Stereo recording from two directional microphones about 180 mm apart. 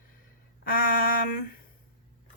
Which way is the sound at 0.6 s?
50° left (ahead or behind).